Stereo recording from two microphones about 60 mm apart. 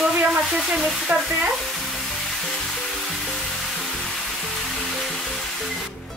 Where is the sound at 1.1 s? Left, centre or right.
Right.